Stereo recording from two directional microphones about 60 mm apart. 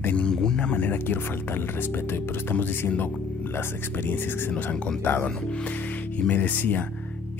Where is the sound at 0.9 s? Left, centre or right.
Left.